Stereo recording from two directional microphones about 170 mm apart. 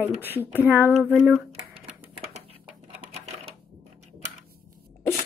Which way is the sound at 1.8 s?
40° right (ahead or behind).